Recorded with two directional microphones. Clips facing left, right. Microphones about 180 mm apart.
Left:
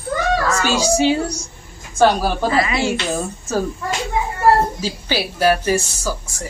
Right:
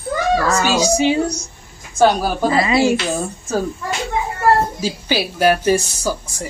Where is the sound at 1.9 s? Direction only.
10° right (ahead or behind).